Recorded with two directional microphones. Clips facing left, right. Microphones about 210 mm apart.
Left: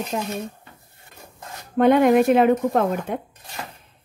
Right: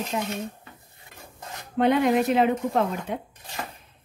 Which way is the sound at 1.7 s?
50° left (ahead or behind).